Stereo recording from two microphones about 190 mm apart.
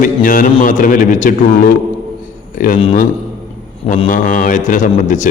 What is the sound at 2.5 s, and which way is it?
Speech, 45° left (ahead or behind).